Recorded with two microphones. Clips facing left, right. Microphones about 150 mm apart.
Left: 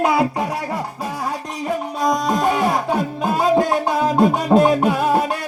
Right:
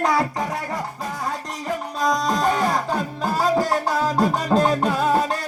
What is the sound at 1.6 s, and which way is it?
Music, 20° left (ahead or behind).